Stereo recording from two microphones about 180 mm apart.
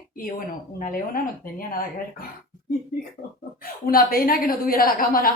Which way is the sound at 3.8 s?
55° left (ahead or behind).